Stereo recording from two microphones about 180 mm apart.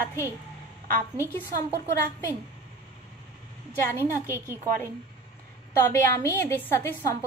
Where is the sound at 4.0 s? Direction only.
15° left (ahead or behind).